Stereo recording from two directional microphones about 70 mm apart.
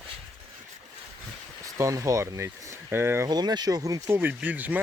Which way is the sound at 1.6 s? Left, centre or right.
Right.